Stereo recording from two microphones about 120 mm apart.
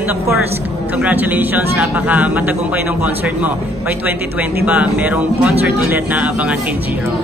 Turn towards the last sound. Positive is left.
turn(degrees=-10)  # may be behind; listen again after turning